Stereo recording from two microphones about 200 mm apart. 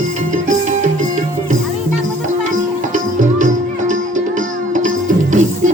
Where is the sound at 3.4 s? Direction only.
40° right (ahead or behind).